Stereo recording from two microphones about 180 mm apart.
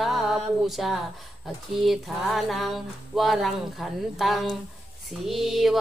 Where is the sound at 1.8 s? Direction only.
Centre (ahead or behind).